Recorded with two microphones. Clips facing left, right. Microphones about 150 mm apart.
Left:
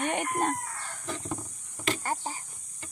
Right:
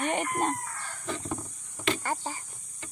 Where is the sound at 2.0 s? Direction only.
15° left (ahead or behind).